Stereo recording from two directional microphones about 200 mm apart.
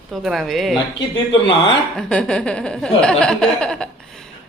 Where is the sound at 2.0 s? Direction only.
5° left (ahead or behind).